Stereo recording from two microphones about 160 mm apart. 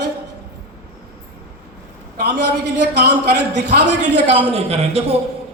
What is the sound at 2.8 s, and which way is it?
Speech, 90° right.